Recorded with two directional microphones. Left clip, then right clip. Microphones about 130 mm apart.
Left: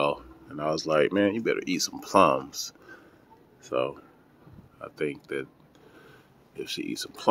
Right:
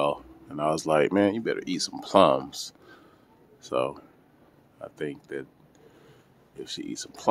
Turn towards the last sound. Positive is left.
turn(degrees=0)  # may be behind; listen again after turning